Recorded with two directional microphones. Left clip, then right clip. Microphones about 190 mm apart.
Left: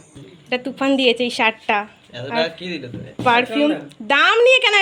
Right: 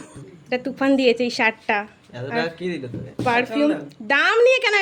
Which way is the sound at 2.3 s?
55° right (ahead or behind).